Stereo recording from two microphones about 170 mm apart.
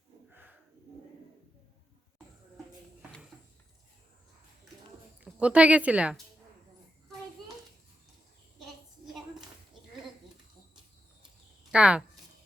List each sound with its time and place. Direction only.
0.3 s a sound: 10° right (ahead or behind)
5.2 s speech: 5° right (ahead or behind)
11.7 s speech: 5° right (ahead or behind)